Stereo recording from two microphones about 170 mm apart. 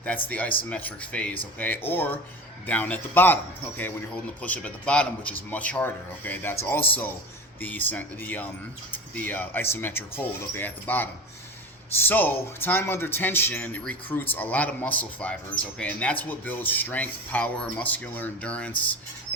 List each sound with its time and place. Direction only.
0.3 s speech: 10° left (ahead or behind)
4.4 s speech: 10° left (ahead or behind)